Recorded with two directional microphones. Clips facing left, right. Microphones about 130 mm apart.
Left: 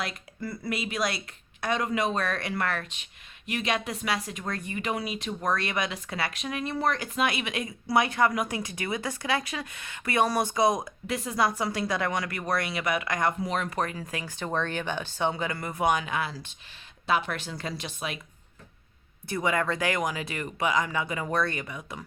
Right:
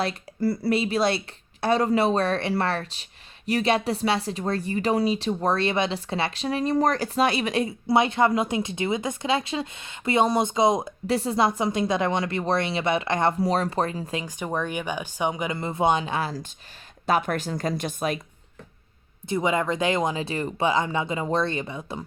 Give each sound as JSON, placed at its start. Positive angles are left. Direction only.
{"t": 0.0, "sound": "speech", "side_deg": -35}
{"t": 19.3, "sound": "speech", "side_deg": -20}